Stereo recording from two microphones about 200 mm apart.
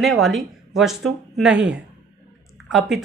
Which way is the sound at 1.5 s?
60° right (ahead or behind).